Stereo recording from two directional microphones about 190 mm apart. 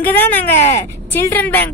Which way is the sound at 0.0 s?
10° left (ahead or behind).